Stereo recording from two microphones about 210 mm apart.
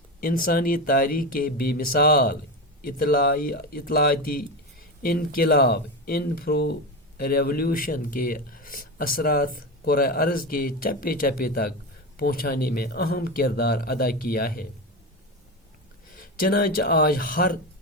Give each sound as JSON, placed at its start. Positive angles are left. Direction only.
{"t": 0.2, "sound": "speech", "side_deg": 45}
{"t": 16.1, "sound": "speech", "side_deg": 45}